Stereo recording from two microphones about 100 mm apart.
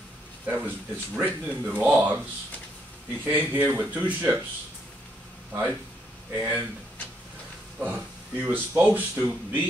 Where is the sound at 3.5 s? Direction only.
20° right (ahead or behind).